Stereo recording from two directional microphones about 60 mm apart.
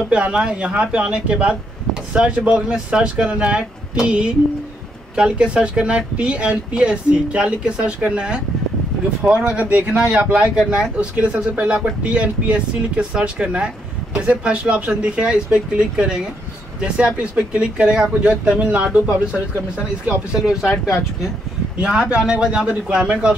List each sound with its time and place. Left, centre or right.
0.1 s speech: centre
9.5 s speech: right
20.8 s speech: centre
21.7 s speech: centre